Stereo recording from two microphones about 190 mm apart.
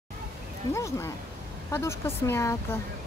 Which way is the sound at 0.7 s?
15° left (ahead or behind).